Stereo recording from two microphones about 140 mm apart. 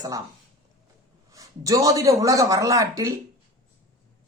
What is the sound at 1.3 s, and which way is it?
Speech, 25° right (ahead or behind).